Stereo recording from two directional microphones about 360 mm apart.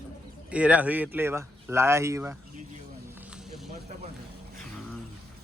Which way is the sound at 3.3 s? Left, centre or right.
Centre.